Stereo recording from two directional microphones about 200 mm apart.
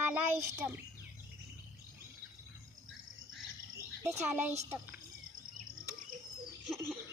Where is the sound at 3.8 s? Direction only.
15° right (ahead or behind).